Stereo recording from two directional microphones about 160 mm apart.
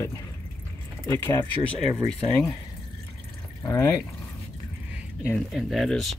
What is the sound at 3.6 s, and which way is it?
Speech, 20° left (ahead or behind).